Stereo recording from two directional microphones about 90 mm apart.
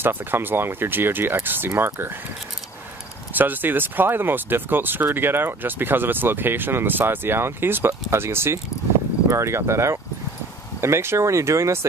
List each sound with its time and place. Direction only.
0.0 s speech: 25° right (ahead or behind)
3.3 s speech: 20° right (ahead or behind)